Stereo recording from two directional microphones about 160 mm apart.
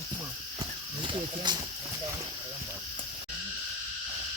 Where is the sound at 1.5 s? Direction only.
25° right (ahead or behind).